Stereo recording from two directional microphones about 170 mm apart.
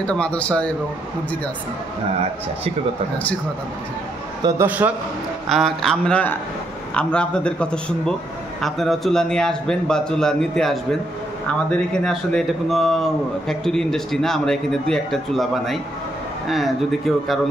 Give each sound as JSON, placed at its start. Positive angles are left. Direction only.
{"t": 0.0, "sound": "speech", "side_deg": 5}
{"t": 4.4, "sound": "a man's voice", "side_deg": -20}
{"t": 4.6, "sound": "a man's voice", "side_deg": -10}
{"t": 5.5, "sound": "a man's voice", "side_deg": 0}